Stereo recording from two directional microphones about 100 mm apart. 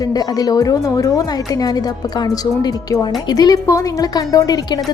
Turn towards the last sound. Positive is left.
turn(degrees=40)  # may be behind; listen again after turning